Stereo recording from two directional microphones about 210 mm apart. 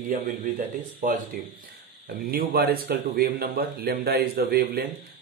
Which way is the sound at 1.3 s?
40° right (ahead or behind).